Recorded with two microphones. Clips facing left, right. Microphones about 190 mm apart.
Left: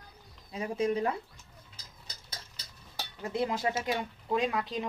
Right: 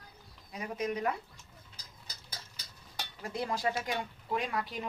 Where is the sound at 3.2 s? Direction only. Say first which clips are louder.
Left 3 dB; 20° left (ahead or behind).